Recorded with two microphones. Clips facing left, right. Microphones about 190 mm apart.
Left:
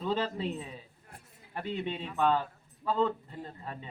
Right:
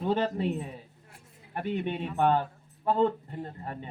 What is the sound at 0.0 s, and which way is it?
A man's voice, 55° right (ahead or behind).